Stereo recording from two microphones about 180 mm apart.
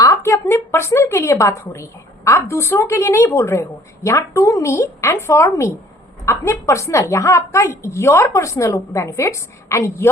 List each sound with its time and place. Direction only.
0.0 s a woman's voice: 15° left (ahead or behind)